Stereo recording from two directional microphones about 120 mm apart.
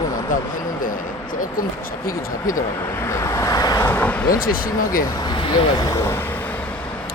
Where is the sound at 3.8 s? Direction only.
15° left (ahead or behind).